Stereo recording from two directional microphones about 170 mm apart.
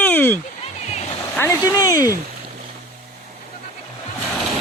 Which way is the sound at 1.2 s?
15° left (ahead or behind).